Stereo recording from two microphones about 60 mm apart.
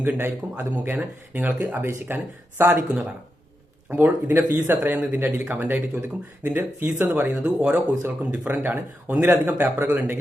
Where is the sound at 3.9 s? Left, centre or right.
Right.